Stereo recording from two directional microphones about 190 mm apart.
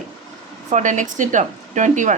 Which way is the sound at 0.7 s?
40° right (ahead or behind).